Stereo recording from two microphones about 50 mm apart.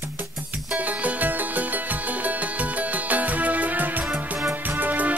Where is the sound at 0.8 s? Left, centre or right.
Right.